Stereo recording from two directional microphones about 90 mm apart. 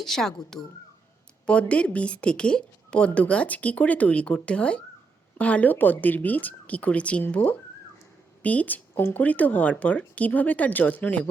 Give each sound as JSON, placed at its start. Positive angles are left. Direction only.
{"t": 0.0, "sound": "speech", "side_deg": 5}